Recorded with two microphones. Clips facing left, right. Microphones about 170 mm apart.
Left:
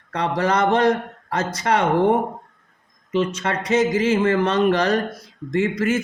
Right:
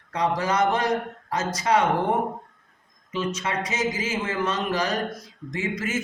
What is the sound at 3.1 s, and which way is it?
Speech, 60° left (ahead or behind).